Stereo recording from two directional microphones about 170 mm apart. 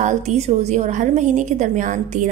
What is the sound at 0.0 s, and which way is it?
A woman's voice, 40° right (ahead or behind).